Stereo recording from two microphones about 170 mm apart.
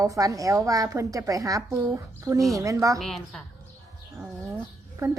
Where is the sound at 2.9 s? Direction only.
Centre (ahead or behind).